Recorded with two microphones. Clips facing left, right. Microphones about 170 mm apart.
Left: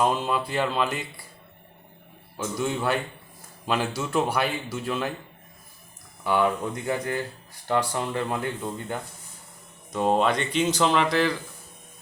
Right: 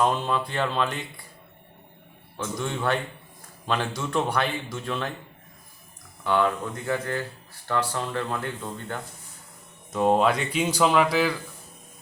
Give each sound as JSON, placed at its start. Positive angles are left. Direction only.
{"t": 0.0, "sound": "a man's voice", "side_deg": 5}
{"t": 2.4, "sound": "a man's voice", "side_deg": 5}
{"t": 6.2, "sound": "speech", "side_deg": 15}
{"t": 9.9, "sound": "a man's voice", "side_deg": 0}